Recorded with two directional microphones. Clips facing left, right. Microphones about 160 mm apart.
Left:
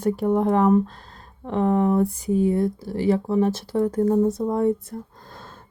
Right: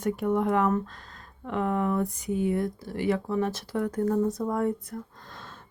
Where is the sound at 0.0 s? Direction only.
30° left (ahead or behind).